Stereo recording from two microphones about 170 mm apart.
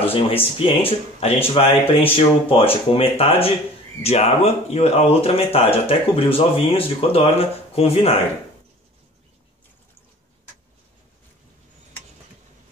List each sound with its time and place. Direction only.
0.0 s speech: 35° left (ahead or behind)